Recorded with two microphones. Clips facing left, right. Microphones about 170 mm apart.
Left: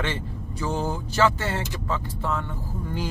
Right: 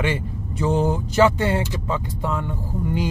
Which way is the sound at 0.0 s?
15° right (ahead or behind).